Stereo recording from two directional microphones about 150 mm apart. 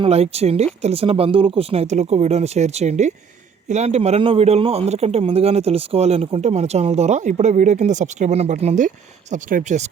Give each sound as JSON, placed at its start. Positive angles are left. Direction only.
{"t": 0.0, "sound": "a man's voice", "side_deg": -40}
{"t": 9.3, "sound": "speech", "side_deg": -60}